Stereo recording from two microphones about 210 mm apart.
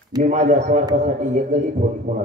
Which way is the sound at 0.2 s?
35° right (ahead or behind).